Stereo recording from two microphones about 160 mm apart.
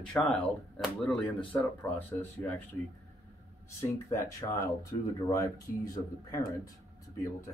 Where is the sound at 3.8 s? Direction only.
20° left (ahead or behind).